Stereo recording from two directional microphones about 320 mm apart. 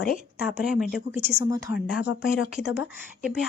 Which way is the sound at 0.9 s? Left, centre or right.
Left.